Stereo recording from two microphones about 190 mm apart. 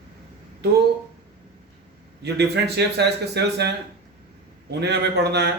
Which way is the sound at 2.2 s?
60° right (ahead or behind).